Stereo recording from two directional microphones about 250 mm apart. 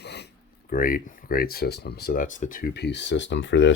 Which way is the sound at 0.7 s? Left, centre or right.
Left.